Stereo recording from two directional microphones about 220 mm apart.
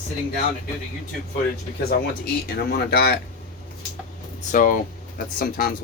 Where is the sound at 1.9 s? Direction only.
45° left (ahead or behind).